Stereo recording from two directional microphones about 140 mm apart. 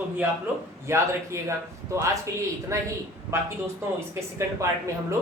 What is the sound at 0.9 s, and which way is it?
Speech, 20° right (ahead or behind).